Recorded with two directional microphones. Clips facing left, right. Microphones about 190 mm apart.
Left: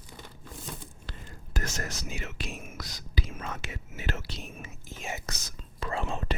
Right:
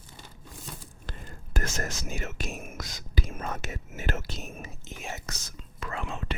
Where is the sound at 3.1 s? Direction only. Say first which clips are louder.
Right 3 dB; 50° right (ahead or behind).